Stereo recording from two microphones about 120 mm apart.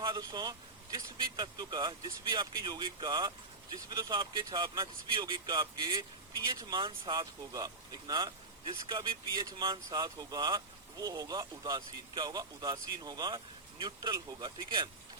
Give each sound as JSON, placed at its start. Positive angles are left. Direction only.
{"t": 0.0, "sound": "speech", "side_deg": -35}